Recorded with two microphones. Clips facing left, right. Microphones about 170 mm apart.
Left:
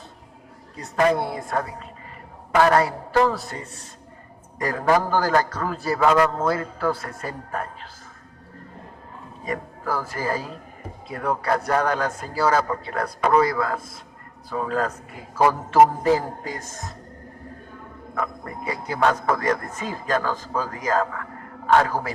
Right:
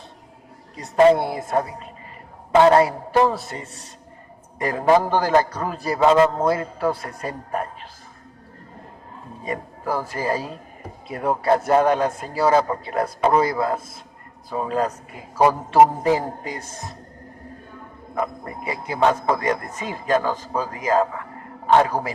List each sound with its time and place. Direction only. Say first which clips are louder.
0.8 s a man's voice: right 6 dB; 25° right (ahead or behind)
9.4 s a man's voice: right 1 dB; 20° right (ahead or behind)
18.1 s a man's voice: right 3 dB; 20° right (ahead or behind)